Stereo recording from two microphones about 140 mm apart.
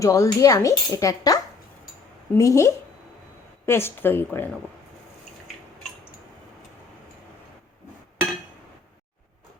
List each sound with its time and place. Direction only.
0.0 s speech: 25° left (ahead or behind)